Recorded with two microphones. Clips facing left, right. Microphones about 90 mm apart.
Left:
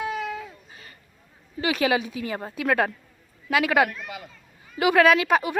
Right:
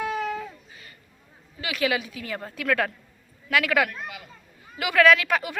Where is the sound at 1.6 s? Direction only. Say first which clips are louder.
Left 3 dB; 30° left (ahead or behind).